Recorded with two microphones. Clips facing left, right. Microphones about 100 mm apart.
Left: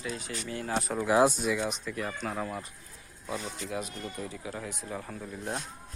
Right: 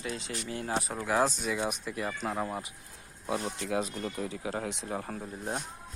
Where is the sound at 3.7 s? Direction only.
35° right (ahead or behind).